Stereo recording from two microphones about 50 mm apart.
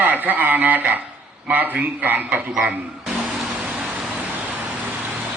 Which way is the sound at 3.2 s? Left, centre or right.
Centre.